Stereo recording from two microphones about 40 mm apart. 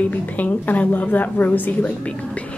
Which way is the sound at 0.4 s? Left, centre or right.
Left.